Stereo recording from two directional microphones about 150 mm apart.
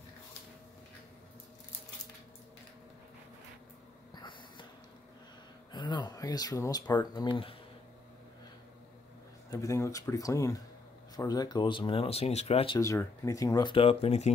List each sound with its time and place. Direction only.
4.1 s snort: 30° left (ahead or behind)
5.7 s speech: 30° left (ahead or behind)
9.5 s speech: 20° left (ahead or behind); by 12.7 s 45° left (ahead or behind)
12.7 s speech: 20° left (ahead or behind); by 14.3 s 45° left (ahead or behind)